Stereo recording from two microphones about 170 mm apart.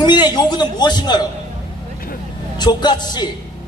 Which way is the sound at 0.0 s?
25° left (ahead or behind).